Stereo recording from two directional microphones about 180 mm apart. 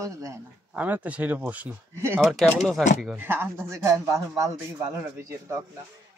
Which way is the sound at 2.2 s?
Centre (ahead or behind).